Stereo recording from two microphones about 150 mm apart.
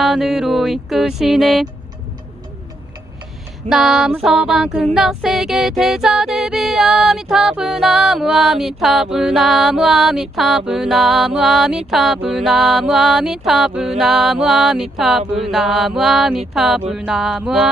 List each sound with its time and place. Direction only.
0.0 s child singing: centre (ahead or behind)
3.7 s child singing: 5° right (ahead or behind)
15.2 s mantra: 40° right (ahead or behind)
15.5 s child singing: centre (ahead or behind)